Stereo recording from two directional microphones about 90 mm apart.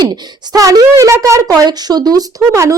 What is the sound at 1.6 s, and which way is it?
Speech, 50° right (ahead or behind).